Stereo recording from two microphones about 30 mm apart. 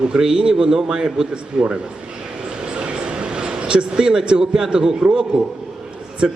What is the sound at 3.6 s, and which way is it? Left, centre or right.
A man's voice, right.